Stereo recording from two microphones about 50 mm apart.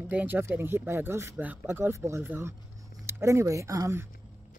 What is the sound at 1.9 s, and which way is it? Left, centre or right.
Speech, right.